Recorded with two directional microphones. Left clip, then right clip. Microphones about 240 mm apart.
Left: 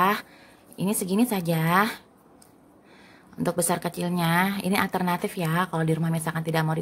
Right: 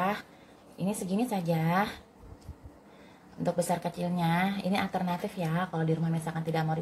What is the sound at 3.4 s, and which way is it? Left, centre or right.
A woman's voice, left.